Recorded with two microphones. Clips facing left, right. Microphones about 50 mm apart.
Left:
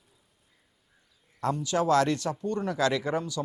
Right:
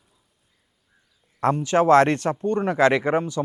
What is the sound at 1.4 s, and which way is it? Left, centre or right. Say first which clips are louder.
Speech: right 8 dB; right.